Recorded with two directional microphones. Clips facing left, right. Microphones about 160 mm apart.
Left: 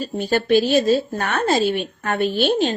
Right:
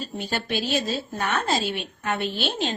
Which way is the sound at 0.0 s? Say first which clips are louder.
Left 9 dB; 45° left (ahead or behind).